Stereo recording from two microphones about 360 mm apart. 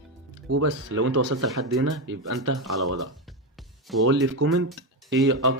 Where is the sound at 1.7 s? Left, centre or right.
Right.